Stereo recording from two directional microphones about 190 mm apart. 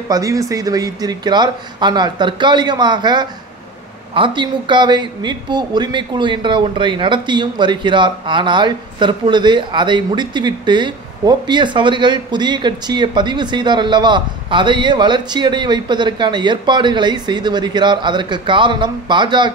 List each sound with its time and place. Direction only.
0.1 s speech: 15° right (ahead or behind)